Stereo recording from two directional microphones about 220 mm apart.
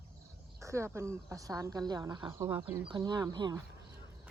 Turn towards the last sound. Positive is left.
turn(degrees=-20)  # may be behind; listen again after turning